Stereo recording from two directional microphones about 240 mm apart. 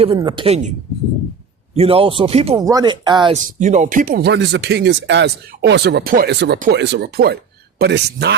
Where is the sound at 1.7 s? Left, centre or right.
Right.